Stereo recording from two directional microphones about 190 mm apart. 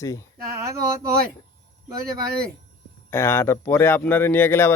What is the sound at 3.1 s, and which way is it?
Speech, 15° left (ahead or behind).